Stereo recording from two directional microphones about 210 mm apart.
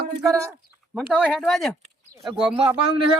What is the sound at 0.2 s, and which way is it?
Speech, centre (ahead or behind).